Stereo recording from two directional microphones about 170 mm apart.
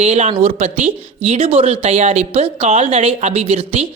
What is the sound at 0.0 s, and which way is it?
Speech, 40° right (ahead or behind).